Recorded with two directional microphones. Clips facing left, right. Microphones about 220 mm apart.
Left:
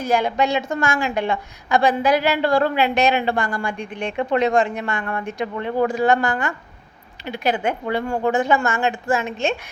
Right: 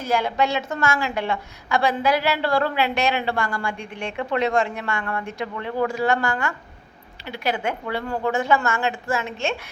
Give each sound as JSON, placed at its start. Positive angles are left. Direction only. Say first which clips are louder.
{"t": 0.0, "sound": "a woman's voice", "louder": "left 3 dB", "side_deg": 15}